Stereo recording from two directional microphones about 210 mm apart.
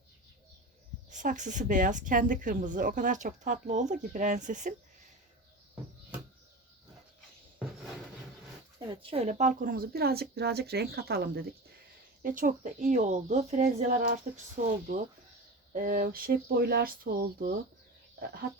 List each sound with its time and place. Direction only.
1.1 s speech: 35° right (ahead or behind)
8.9 s speech: 25° right (ahead or behind); by 17.5 s 45° right (ahead or behind)